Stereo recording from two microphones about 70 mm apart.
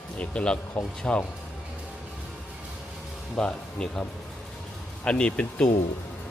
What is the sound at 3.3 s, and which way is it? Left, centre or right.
Speech, centre.